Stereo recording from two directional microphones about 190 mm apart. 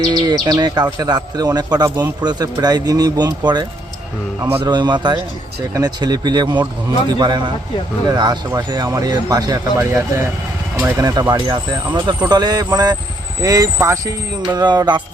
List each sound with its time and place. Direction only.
0.0 s speech: 20° right (ahead or behind)